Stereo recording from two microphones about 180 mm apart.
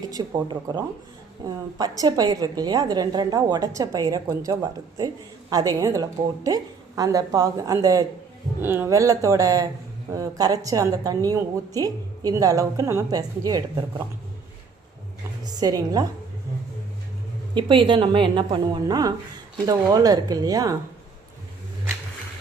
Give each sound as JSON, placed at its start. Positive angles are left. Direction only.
{"t": 0.1, "sound": "a woman's voice", "side_deg": -25}
{"t": 15.6, "sound": "a woman's voice", "side_deg": -20}
{"t": 17.5, "sound": "a woman's voice", "side_deg": -25}